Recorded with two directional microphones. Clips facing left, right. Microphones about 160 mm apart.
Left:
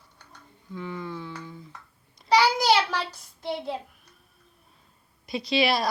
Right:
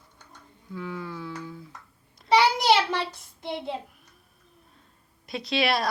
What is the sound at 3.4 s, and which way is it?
Child singing, 20° right (ahead or behind).